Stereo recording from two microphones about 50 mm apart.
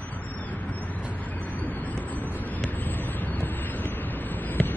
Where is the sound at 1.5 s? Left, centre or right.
Left.